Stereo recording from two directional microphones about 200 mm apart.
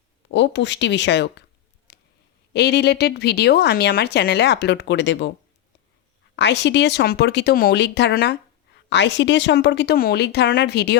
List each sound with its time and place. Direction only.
0.3 s speech: 65° left (ahead or behind)
1.9 s a sound: 55° left (ahead or behind)
2.5 s speech: 55° left (ahead or behind)
6.3 s speech: 60° left (ahead or behind)